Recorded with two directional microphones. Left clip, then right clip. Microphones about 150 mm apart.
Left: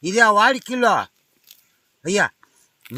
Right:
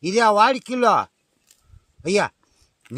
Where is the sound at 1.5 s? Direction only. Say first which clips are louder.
Left 8 dB; 70° right (ahead or behind).